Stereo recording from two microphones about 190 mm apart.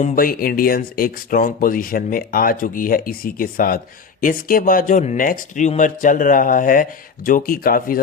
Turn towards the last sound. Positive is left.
turn(degrees=50)  # may be behind; listen again after turning